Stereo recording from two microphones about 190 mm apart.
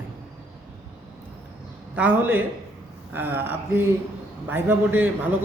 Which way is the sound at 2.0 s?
10° right (ahead or behind).